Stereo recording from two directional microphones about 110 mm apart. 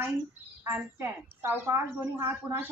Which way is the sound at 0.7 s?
20° right (ahead or behind).